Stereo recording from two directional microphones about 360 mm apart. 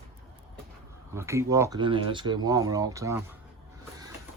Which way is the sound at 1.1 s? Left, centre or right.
Centre.